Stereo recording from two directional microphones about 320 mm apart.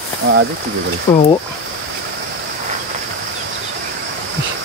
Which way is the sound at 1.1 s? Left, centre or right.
Centre.